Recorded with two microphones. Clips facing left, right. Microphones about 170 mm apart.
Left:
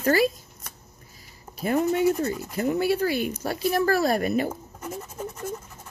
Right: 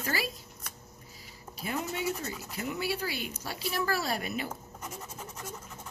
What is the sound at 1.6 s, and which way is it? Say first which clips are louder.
Speech: left 12 dB; 50° left (ahead or behind).